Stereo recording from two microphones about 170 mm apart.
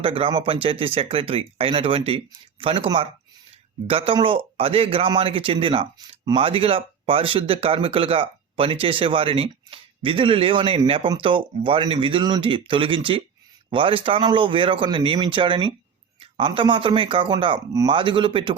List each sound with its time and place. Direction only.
0.0 s speech: 30° right (ahead or behind)